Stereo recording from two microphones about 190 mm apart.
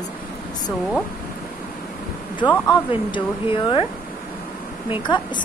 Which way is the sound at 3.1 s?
25° left (ahead or behind).